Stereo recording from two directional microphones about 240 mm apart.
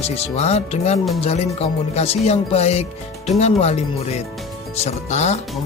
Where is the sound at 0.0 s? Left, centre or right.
Left.